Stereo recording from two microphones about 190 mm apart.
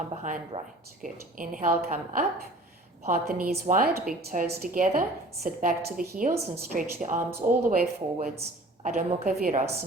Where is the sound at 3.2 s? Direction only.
50° right (ahead or behind).